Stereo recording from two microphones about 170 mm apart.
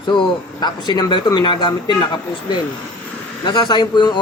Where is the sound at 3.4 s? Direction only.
25° left (ahead or behind).